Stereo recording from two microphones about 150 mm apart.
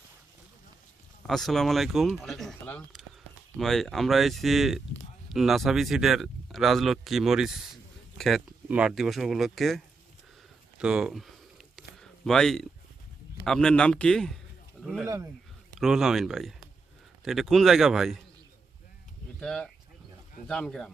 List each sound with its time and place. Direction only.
1.3 s speech: centre (ahead or behind)
10.8 s a sound: 5° right (ahead or behind)
13.4 s speech: 5° left (ahead or behind)
15.0 s speech: 20° right (ahead or behind)
15.8 s speech: centre (ahead or behind)
19.4 s speech: 5° left (ahead or behind)